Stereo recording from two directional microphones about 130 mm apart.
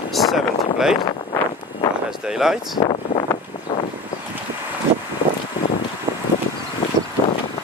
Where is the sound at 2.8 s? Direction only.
65° left (ahead or behind).